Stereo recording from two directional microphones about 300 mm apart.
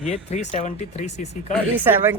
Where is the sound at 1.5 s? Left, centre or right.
Centre.